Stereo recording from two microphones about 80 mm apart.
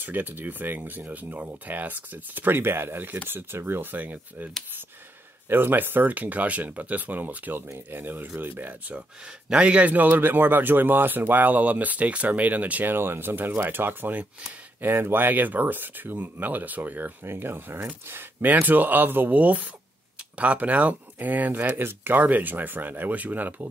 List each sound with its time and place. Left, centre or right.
0.0 s a man's voice: right
5.5 s a man's voice: right